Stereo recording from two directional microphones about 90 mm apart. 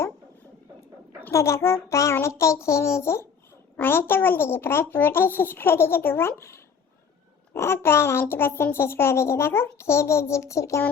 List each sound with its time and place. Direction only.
1.3 s a child's voice: 30° left (ahead or behind)